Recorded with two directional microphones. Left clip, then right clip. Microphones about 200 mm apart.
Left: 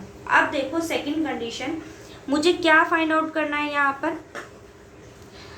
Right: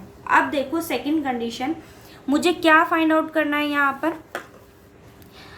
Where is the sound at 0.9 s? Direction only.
45° right (ahead or behind).